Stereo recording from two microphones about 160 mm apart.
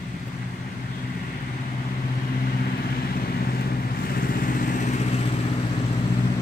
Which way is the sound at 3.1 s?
70° left (ahead or behind).